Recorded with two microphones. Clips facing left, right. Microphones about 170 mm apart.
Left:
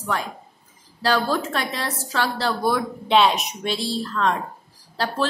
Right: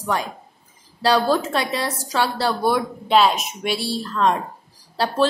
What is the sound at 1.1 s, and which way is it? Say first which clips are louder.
A woman's voice: right 4 dB; 15° right (ahead or behind).